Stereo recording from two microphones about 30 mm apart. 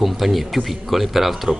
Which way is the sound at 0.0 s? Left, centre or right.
Centre.